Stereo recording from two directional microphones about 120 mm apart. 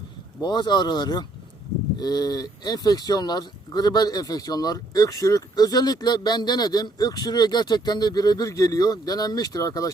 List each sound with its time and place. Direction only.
0.4 s speech: 35° left (ahead or behind)